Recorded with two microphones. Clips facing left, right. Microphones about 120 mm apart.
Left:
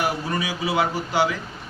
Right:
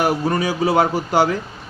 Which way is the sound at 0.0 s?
45° right (ahead or behind).